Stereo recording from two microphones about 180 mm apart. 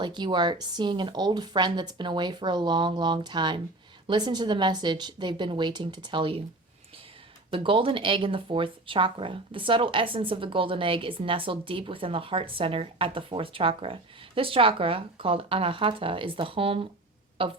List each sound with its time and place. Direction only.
0.0 s speech: 25° right (ahead or behind)
7.5 s speech: 30° right (ahead or behind)